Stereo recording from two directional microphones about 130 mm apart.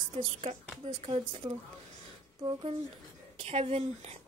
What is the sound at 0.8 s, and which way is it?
Speech, 50° right (ahead or behind).